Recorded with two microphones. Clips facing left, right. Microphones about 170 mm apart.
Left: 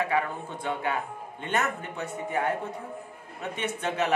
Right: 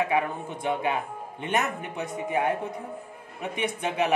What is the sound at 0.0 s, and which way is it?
A man's voice, 15° right (ahead or behind).